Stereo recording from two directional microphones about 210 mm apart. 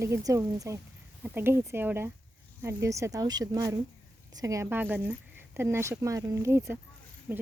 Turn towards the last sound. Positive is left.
turn(degrees=-5)  # may be behind; listen again after turning